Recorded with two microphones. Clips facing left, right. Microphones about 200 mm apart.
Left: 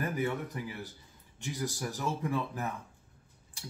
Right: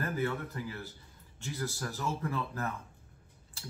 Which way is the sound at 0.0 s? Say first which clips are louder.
Left 1 dB; 15° left (ahead or behind).